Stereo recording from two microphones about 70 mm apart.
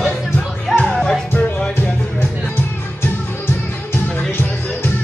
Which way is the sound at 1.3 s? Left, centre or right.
Left.